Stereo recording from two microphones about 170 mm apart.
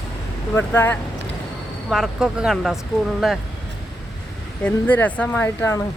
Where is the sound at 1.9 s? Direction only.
Centre (ahead or behind).